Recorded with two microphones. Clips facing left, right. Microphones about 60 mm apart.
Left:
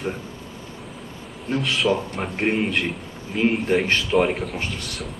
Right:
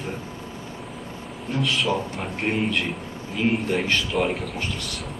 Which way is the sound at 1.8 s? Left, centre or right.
Centre.